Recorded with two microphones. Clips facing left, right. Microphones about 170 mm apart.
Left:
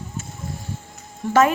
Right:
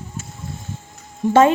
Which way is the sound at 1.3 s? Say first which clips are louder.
Right 4 dB; 25° right (ahead or behind).